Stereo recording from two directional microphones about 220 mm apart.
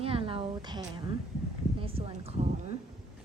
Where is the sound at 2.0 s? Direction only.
25° right (ahead or behind).